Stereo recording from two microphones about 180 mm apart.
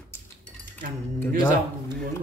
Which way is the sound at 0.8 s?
55° right (ahead or behind).